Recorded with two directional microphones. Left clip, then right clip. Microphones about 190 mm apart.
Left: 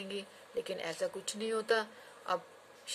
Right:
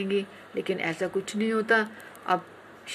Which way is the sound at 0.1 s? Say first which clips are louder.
Right 11 dB; 25° left (ahead or behind).